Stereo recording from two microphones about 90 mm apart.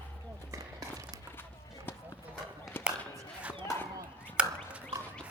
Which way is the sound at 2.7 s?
25° left (ahead or behind).